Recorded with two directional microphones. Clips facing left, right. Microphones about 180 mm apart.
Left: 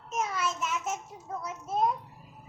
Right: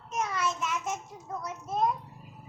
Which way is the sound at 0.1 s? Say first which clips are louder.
Even; 5° left (ahead or behind).